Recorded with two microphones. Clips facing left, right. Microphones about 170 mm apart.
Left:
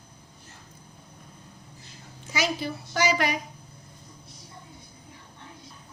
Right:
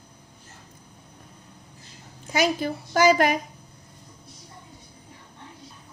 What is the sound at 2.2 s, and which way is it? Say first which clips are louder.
A woman's voice: right 5 dB; 50° right (ahead or behind).